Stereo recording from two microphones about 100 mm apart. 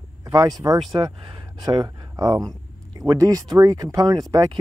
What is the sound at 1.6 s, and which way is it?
Speech, 45° right (ahead or behind).